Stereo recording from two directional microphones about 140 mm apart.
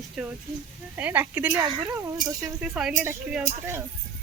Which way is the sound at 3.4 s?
20° right (ahead or behind).